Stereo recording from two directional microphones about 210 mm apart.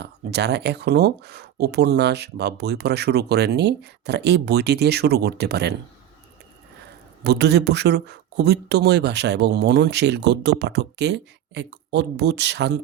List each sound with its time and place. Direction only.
0.0 s speech: 50° right (ahead or behind)
7.3 s speech: 50° right (ahead or behind)